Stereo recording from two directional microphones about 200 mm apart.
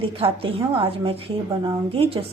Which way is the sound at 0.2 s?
30° right (ahead or behind).